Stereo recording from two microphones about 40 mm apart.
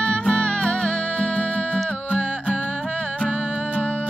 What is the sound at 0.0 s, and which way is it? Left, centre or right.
Music, centre.